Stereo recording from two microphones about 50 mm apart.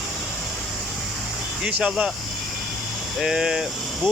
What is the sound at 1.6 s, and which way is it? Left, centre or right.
Speech, centre.